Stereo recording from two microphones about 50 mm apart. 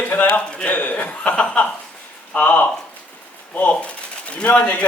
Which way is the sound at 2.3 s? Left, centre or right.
Left.